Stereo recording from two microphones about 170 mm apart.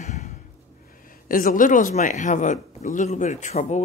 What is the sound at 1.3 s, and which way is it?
Speech, 55° left (ahead or behind).